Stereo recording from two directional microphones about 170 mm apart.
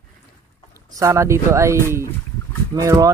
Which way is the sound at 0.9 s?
15° right (ahead or behind).